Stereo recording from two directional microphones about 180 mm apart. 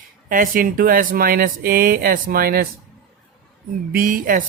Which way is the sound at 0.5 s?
50° right (ahead or behind).